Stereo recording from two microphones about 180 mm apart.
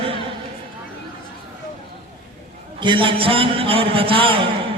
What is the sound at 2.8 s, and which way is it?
A man's voice, 25° right (ahead or behind).